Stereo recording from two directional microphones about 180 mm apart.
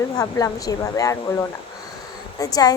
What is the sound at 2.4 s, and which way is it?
Speech, 20° left (ahead or behind).